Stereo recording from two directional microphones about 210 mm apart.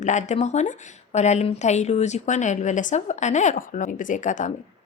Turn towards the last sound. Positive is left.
turn(degrees=35)  # may be behind; listen again after turning